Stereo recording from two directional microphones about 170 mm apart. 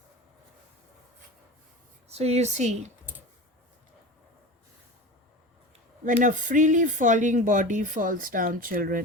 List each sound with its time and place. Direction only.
2.0 s speech: 40° right (ahead or behind)
6.1 s speech: 50° right (ahead or behind)